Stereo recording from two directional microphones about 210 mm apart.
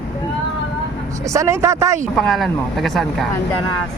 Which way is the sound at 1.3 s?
15° right (ahead or behind).